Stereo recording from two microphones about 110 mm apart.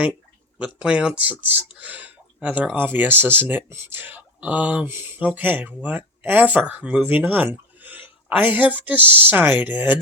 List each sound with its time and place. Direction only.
0.6 s speech: 10° right (ahead or behind)